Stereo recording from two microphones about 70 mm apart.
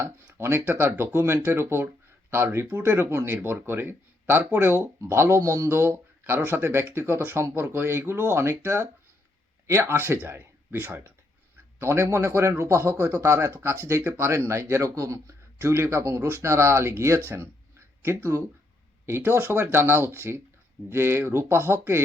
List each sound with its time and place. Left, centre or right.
0.0 s speech: right
5.4 s a man's voice: right
5.6 s speech: right
14.0 s speech: right
14.3 s a man's voice: right
15.5 s speech: right